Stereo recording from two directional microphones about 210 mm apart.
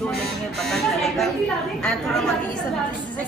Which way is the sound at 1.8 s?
5° left (ahead or behind).